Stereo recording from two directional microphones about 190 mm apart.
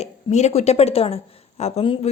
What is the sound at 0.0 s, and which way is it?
Speech, 35° left (ahead or behind).